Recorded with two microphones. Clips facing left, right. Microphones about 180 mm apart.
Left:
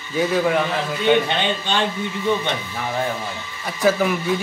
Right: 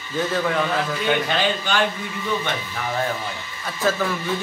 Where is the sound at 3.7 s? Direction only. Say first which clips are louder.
Left 4 dB; 15° left (ahead or behind).